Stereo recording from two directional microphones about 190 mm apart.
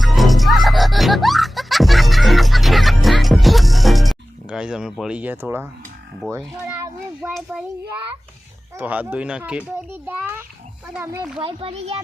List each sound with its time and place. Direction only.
0.0 s music: centre (ahead or behind)
6.3 s a child's voice: 15° right (ahead or behind)
8.8 s a child's voice: 10° right (ahead or behind)
11.3 s a child's voice: 30° right (ahead or behind)